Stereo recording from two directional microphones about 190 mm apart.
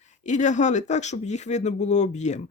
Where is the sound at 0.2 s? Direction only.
40° left (ahead or behind).